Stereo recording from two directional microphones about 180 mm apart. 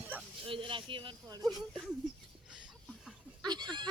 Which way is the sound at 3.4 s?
25° right (ahead or behind).